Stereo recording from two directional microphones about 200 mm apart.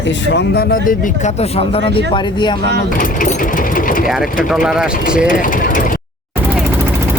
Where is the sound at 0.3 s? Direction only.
55° left (ahead or behind); by 2.6 s 20° left (ahead or behind).